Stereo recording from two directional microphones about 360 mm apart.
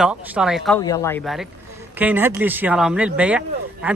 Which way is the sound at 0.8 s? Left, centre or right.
Centre.